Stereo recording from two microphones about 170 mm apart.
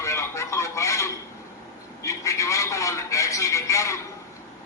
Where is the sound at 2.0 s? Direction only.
20° left (ahead or behind).